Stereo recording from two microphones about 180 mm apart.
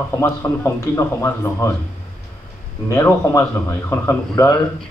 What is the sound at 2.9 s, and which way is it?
Speech, 15° left (ahead or behind).